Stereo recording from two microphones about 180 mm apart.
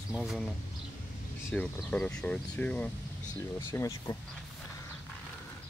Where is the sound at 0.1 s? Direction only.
Centre (ahead or behind).